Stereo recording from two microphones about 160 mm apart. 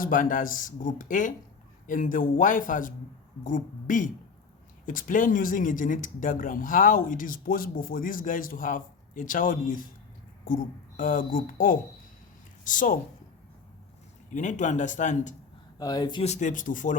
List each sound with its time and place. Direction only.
0.0 s speech: 55° left (ahead or behind)
14.3 s speech: 50° left (ahead or behind)
15.8 s speech: 25° left (ahead or behind)
16.2 s speech: 50° left (ahead or behind)